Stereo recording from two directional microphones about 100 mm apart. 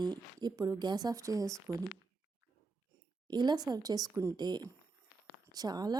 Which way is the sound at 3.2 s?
45° right (ahead or behind).